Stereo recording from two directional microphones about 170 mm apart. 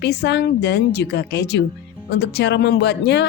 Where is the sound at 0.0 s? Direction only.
80° left.